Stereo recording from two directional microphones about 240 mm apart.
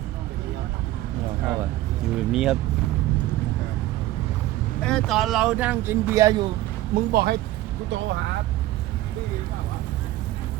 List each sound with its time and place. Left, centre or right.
2.1 s speech: centre
4.8 s speech: centre
6.9 s speech: right